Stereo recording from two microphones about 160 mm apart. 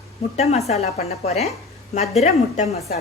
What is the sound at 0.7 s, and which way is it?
A woman's voice, 40° left (ahead or behind).